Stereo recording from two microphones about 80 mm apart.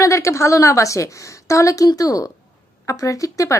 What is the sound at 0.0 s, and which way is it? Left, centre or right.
A woman's voice, left.